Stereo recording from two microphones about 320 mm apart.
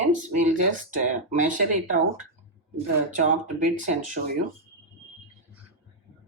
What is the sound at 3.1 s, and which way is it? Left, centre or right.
Speech, right.